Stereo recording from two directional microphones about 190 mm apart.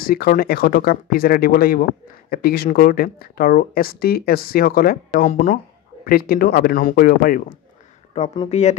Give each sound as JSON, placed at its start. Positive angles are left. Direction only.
{"t": 0.0, "sound": "speech", "side_deg": 50}
{"t": 6.0, "sound": "speech", "side_deg": 50}
{"t": 8.1, "sound": "speech", "side_deg": 35}